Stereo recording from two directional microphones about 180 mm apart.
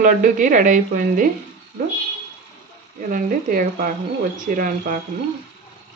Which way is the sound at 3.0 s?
50° right (ahead or behind).